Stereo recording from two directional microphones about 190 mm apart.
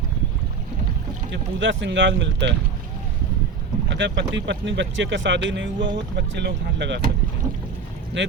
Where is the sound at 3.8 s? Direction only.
70° right (ahead or behind).